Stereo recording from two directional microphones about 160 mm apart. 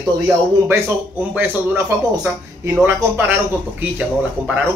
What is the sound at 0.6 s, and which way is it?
A man's voice, 15° right (ahead or behind).